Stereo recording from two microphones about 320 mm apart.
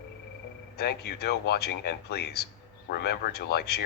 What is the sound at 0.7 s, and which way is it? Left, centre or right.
Speech, left.